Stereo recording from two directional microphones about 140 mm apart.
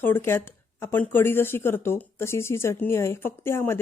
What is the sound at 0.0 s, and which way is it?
Speech, 15° left (ahead or behind).